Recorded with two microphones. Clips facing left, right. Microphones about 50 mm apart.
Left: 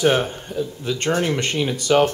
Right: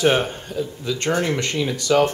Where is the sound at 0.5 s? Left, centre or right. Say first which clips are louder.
Left 1 dB; left.